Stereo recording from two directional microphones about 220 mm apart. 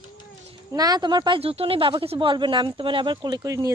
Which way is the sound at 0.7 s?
15° right (ahead or behind).